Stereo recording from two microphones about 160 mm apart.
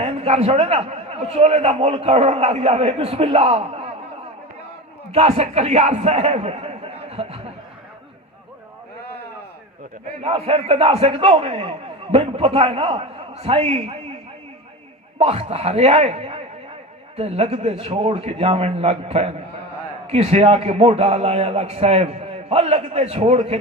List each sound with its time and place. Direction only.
0.0 s a man's voice: 40° right (ahead or behind)
5.1 s a man's voice: 40° right (ahead or behind)
10.2 s a man's voice: 40° right (ahead or behind)
15.2 s a man's voice: 40° right (ahead or behind)